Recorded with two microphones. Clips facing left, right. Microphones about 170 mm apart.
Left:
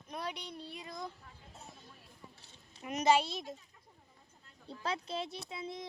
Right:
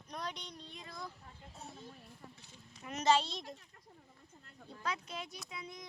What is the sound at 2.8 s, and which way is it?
Speech, 15° left (ahead or behind).